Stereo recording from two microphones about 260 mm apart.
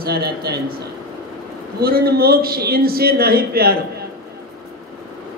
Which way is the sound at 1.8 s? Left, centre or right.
Right.